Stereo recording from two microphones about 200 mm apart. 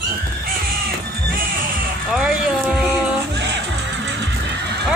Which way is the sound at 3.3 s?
60° right (ahead or behind).